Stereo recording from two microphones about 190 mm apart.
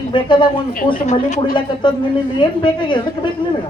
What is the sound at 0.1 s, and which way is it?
Speech, 25° left (ahead or behind).